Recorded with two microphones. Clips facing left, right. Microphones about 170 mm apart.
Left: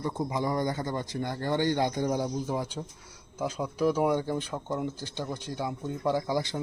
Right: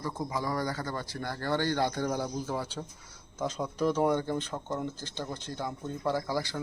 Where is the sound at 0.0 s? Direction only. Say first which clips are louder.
Left 3 dB; 20° left (ahead or behind).